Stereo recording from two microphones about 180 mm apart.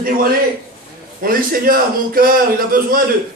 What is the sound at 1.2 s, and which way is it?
A man's voice, 55° right (ahead or behind).